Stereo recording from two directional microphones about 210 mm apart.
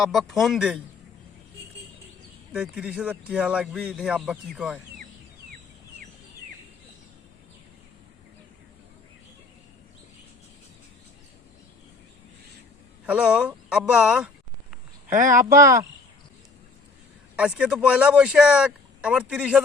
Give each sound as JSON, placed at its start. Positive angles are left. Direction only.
{"t": 0.0, "sound": "speech", "side_deg": 0}
{"t": 2.5, "sound": "speech", "side_deg": -5}
{"t": 13.1, "sound": "speech", "side_deg": -5}
{"t": 15.0, "sound": "speech", "side_deg": -40}
{"t": 15.4, "sound": "speech", "side_deg": -15}
{"t": 17.3, "sound": "speech", "side_deg": -5}